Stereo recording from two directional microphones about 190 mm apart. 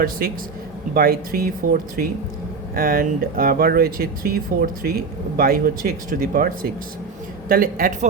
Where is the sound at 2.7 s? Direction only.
50° right (ahead or behind).